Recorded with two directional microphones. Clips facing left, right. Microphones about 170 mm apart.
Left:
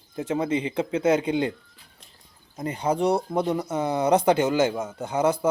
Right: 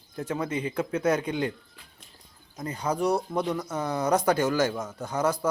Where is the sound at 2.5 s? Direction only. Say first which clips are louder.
Left 4 dB; 30° left (ahead or behind).